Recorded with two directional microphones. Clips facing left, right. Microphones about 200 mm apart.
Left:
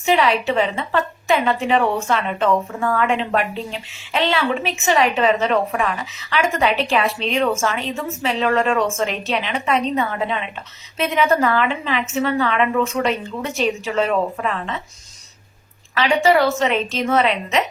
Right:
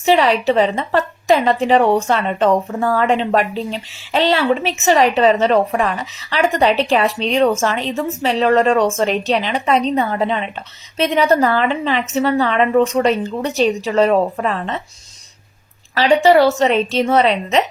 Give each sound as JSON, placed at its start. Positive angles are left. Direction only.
{"t": 0.0, "sound": "a woman's voice", "side_deg": -35}
{"t": 16.0, "sound": "a woman's voice", "side_deg": -35}